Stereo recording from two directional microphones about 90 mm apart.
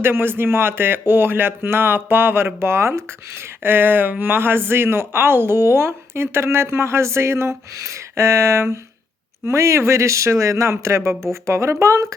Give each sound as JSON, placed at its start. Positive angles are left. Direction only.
{"t": 0.0, "sound": "speech", "side_deg": -25}